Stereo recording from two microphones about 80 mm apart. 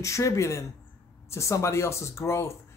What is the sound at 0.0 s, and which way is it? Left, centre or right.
Speech, left.